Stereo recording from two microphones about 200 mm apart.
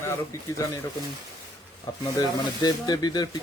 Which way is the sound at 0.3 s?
15° left (ahead or behind).